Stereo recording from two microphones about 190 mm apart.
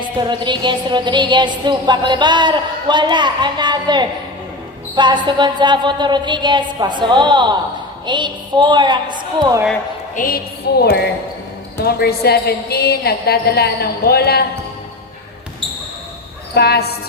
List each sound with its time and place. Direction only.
0.0 s a woman's voice: 25° right (ahead or behind)
10.2 s a woman's voice: 50° left (ahead or behind)
16.6 s a woman's voice: 55° left (ahead or behind)